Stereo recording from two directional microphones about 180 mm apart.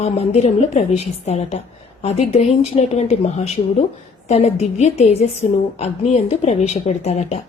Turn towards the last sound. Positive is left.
turn(degrees=35)  # may be behind; listen again after turning